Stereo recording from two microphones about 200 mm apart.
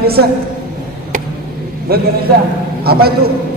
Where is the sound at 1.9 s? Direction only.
50° right (ahead or behind).